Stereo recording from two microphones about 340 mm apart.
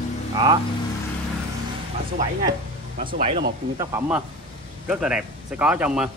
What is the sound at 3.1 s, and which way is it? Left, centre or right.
Speech, right.